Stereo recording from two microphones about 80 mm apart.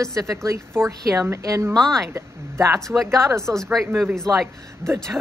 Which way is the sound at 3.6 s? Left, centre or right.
Centre.